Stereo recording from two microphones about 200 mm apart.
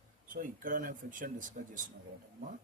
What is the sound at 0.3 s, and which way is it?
Speech, 45° right (ahead or behind).